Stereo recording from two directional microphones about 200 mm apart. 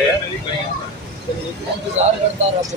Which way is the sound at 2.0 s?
30° right (ahead or behind).